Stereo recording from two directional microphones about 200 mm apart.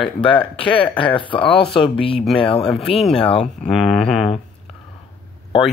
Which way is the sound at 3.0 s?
Centre (ahead or behind).